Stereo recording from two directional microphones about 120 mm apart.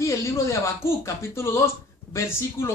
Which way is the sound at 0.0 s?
25° left (ahead or behind).